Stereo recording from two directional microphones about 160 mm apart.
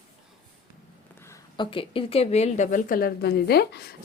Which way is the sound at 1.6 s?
35° left (ahead or behind).